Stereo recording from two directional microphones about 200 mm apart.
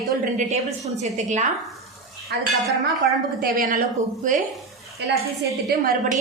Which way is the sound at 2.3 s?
60° right (ahead or behind).